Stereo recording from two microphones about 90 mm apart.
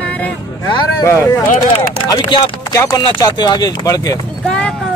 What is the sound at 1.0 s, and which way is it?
Speech, 35° left (ahead or behind).